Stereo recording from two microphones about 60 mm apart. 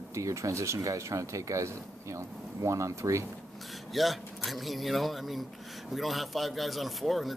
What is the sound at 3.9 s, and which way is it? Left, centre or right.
Speech, centre.